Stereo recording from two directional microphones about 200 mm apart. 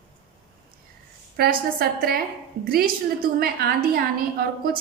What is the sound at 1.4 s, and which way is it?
A woman's voice, 50° right (ahead or behind).